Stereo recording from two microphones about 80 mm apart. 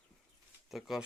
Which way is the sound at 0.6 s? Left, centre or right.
Centre.